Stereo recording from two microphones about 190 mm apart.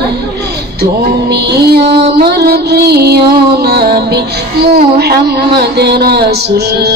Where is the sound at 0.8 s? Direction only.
60° right (ahead or behind).